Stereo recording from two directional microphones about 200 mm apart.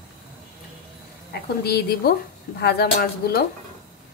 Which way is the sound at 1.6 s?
50° left (ahead or behind).